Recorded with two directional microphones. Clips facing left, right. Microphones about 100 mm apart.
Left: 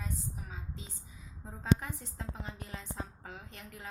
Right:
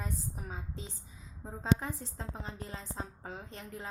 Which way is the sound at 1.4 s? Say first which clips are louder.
Even; 25° right (ahead or behind).